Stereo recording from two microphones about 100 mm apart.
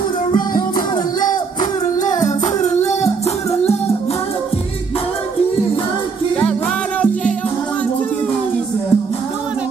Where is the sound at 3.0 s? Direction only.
90° left.